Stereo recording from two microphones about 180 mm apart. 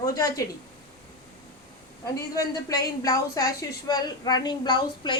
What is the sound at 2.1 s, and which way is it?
A woman's voice, 20° left (ahead or behind).